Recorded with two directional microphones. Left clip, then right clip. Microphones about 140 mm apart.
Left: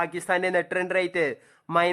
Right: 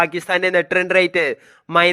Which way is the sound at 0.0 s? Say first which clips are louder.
Right 7 dB; 30° right (ahead or behind).